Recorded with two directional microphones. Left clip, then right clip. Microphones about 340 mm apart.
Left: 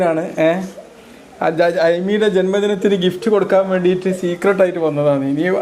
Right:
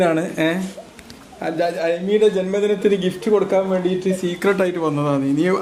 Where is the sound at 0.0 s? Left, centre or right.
Centre.